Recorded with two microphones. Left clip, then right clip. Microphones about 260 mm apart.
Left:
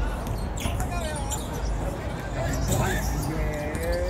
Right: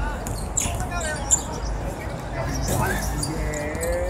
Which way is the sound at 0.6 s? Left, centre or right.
Centre.